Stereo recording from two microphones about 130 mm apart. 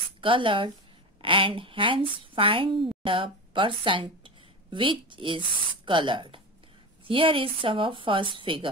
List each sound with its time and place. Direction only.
0.2 s a woman's voice: 40° right (ahead or behind)